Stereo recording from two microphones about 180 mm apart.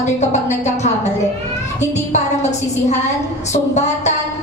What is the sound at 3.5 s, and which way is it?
Speech, 40° left (ahead or behind).